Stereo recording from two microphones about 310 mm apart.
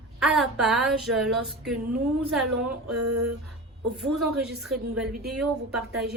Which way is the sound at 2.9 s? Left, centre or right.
Right.